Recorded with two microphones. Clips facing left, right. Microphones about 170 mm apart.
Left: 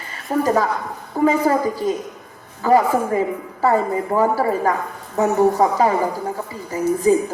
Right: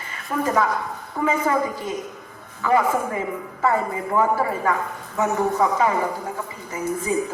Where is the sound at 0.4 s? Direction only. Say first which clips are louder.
Even; 35° left (ahead or behind).